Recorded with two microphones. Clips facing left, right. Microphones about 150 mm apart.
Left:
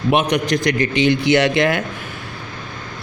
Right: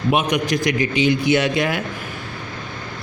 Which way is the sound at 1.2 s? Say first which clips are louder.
Left 3 dB; 80° left.